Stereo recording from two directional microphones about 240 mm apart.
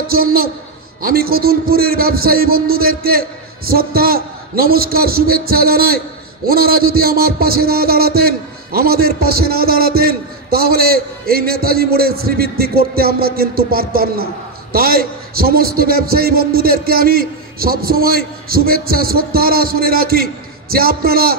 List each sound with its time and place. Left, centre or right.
0.1 s a man's voice: right